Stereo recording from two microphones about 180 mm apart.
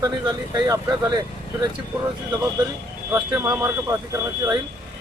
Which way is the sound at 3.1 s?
20° right (ahead or behind).